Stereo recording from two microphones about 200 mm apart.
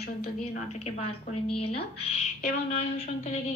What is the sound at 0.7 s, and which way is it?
A woman's voice, 30° left (ahead or behind).